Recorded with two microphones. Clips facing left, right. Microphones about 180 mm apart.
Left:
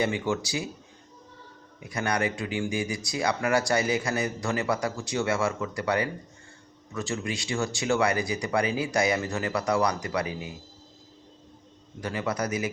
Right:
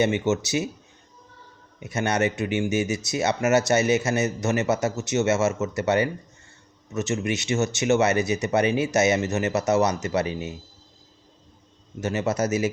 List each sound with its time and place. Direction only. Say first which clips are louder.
0.0 s speech: right 5 dB; 25° right (ahead or behind)
1.8 s speech: right 4 dB; 25° right (ahead or behind)
11.9 s speech: right 5 dB; 25° right (ahead or behind)